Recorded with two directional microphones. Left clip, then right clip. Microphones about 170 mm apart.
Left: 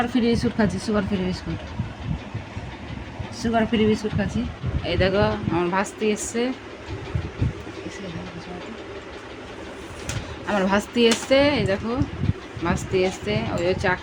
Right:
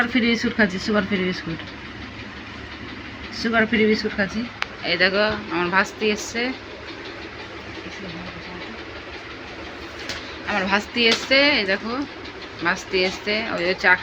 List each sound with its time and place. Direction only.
0.0 s speech: centre (ahead or behind)
3.3 s speech: centre (ahead or behind)
4.8 s speech: 20° left (ahead or behind)
10.4 s speech: 40° left (ahead or behind); by 14.0 s 20° left (ahead or behind)